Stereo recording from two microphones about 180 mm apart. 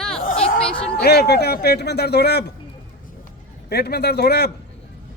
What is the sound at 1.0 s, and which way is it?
Speech, 60° left (ahead or behind).